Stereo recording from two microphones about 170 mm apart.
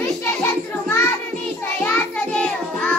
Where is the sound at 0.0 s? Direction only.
15° left (ahead or behind).